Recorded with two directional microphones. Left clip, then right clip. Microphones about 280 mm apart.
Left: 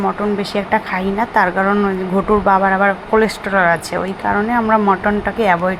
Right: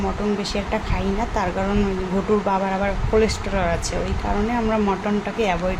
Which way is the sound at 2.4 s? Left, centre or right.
Centre.